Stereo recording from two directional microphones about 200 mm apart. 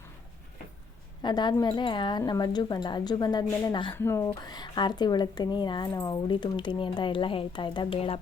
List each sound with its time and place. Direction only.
1.2 s speech: 20° left (ahead or behind)
3.9 s speech: 10° left (ahead or behind); by 8.2 s 30° left (ahead or behind)